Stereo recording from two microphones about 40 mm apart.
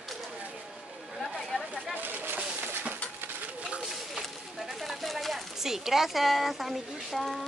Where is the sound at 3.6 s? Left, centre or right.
Centre.